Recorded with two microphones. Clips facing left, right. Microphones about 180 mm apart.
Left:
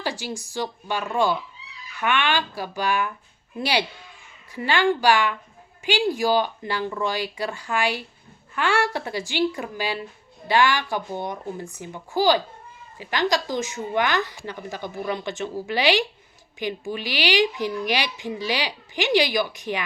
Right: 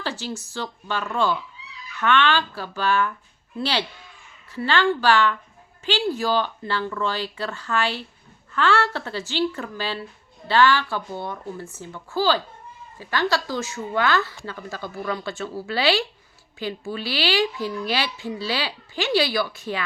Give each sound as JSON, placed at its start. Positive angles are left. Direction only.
{"t": 0.0, "sound": "speech", "side_deg": 15}